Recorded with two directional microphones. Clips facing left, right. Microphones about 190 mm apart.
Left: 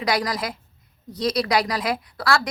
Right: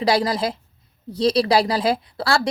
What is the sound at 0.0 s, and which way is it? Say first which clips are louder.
A woman's voice: right 5 dB; 30° right (ahead or behind).